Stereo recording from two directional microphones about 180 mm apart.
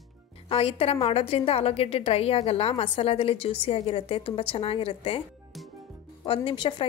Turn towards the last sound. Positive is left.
turn(degrees=25)  # may be behind; listen again after turning